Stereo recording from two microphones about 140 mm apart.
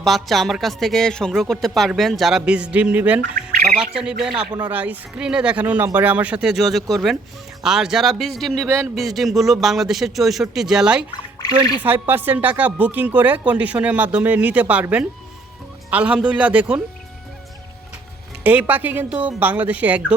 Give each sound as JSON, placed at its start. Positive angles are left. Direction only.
{"t": 0.0, "sound": "speech", "side_deg": 0}
{"t": 3.2, "sound": "speech", "side_deg": -90}
{"t": 3.8, "sound": "speech", "side_deg": -5}
{"t": 12.0, "sound": "speech", "side_deg": -15}
{"t": 18.4, "sound": "speech", "side_deg": -10}